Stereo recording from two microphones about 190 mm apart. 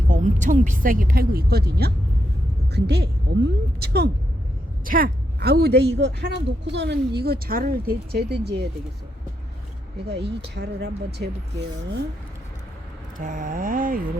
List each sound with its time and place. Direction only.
0.1 s speech: 40° right (ahead or behind); by 8.6 s 60° right (ahead or behind)
10.1 s speech: 60° right (ahead or behind)
13.1 s speech: 45° right (ahead or behind)